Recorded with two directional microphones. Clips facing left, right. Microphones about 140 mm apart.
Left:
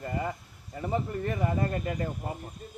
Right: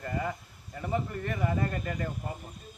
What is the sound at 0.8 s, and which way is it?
Speech, 25° left (ahead or behind).